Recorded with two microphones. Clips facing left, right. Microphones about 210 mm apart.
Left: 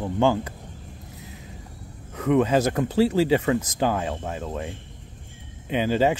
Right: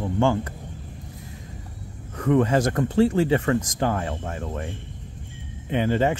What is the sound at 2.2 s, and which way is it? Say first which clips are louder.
Speech: even; 10° left (ahead or behind).